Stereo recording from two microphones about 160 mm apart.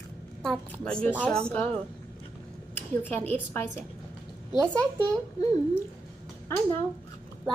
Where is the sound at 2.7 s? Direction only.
10° left (ahead or behind).